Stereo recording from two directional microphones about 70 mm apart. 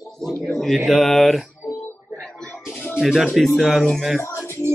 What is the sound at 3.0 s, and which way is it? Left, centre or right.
Speech, centre.